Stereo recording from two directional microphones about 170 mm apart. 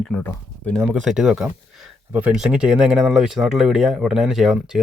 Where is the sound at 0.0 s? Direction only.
5° left (ahead or behind).